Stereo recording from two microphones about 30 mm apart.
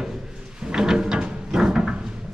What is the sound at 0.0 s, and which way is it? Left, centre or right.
Drawer open or close, right.